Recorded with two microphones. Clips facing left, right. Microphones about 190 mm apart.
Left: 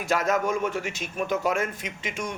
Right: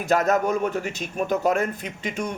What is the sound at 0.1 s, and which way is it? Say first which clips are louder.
A man's voice: right 4 dB; 40° right (ahead or behind).